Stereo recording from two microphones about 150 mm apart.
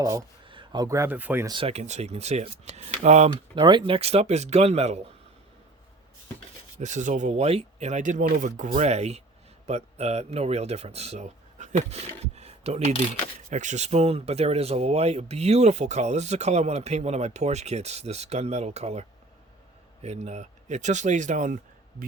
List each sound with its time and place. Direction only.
0.0 s speech: 20° right (ahead or behind)
0.4 s speech: 35° right (ahead or behind); by 1.5 s 10° right (ahead or behind)
1.5 s speech: 35° right (ahead or behind)
3.5 s speech: 30° right (ahead or behind)
6.7 s speech: 55° right (ahead or behind)